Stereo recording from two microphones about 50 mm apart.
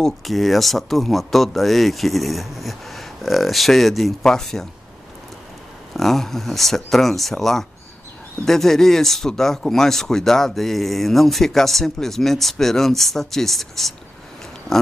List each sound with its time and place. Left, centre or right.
0.0 s speech: centre
5.9 s speech: centre